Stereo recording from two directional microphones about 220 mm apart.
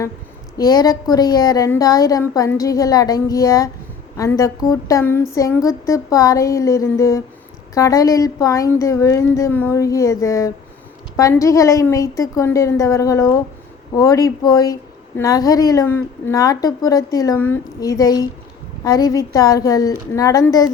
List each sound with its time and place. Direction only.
0.5 s a woman's voice: 15° left (ahead or behind)